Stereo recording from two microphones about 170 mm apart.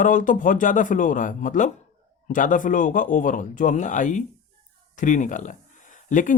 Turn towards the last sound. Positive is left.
turn(degrees=50)  # may be behind; listen again after turning